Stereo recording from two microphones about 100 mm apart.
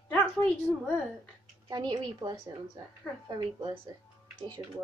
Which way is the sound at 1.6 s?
45° right (ahead or behind).